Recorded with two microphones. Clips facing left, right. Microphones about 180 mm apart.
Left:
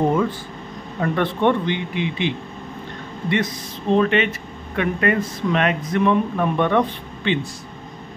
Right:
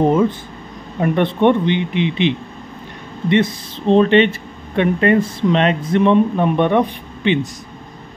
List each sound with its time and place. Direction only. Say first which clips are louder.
0.0 s speech: right 5 dB; 20° right (ahead or behind)